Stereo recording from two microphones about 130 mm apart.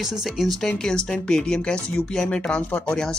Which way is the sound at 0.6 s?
5° left (ahead or behind).